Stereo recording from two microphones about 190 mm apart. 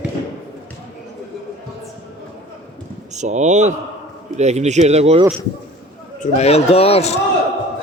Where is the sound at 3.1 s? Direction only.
40° right (ahead or behind).